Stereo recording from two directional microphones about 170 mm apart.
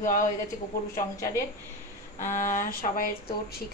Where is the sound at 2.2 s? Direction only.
50° left (ahead or behind).